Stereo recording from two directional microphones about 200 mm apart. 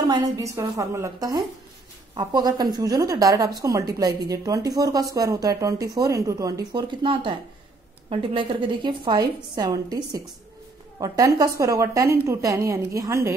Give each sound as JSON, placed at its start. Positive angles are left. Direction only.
{"t": 0.0, "sound": "a woman's voice", "side_deg": -20}